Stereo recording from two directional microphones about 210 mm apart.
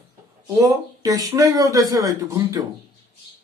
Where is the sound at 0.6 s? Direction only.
15° right (ahead or behind).